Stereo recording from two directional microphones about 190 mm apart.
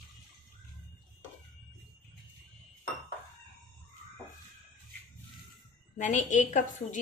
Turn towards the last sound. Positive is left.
turn(degrees=40)  # may be behind; listen again after turning